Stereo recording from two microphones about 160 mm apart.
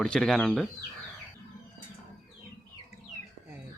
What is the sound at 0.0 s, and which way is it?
Speech, 5° left (ahead or behind).